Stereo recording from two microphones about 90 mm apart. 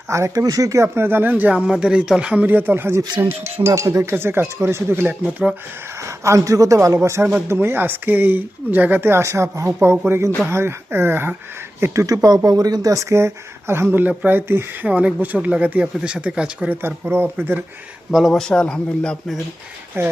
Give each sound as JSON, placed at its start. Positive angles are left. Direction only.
{"t": 0.1, "sound": "speech", "side_deg": -35}
{"t": 4.1, "sound": "speech", "side_deg": -25}
{"t": 11.8, "sound": "speech", "side_deg": -40}
{"t": 14.8, "sound": "speech", "side_deg": -15}
{"t": 16.8, "sound": "speech", "side_deg": -25}
{"t": 18.1, "sound": "speech", "side_deg": 0}
{"t": 20.0, "sound": "speech", "side_deg": -25}